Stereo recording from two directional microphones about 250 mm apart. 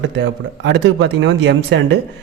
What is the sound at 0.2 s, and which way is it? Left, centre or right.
A man's voice, right.